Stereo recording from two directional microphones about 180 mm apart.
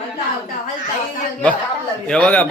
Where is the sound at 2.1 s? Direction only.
5° left (ahead or behind).